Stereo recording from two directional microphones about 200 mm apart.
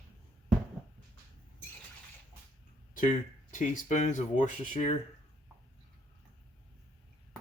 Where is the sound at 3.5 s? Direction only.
40° left (ahead or behind).